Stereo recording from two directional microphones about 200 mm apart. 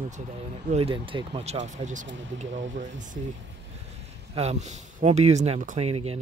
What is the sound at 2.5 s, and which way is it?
Speech, 70° right (ahead or behind).